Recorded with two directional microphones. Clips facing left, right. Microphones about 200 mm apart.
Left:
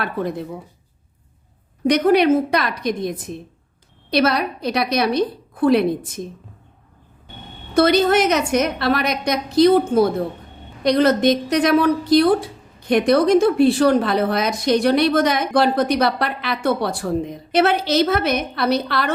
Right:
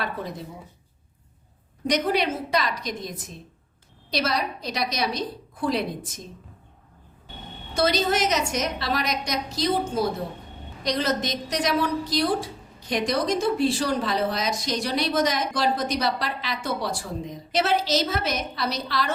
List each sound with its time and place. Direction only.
0.0 s a woman's voice: 60° left (ahead or behind)
1.9 s a woman's voice: 60° left (ahead or behind)
7.7 s a woman's voice: 60° left (ahead or behind)